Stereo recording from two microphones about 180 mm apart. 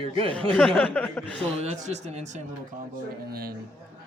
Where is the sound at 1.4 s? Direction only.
35° right (ahead or behind).